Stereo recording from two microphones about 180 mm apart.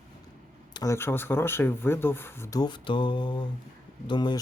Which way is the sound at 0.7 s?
20° left (ahead or behind).